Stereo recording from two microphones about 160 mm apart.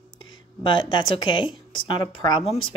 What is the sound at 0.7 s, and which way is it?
Speech, 30° left (ahead or behind).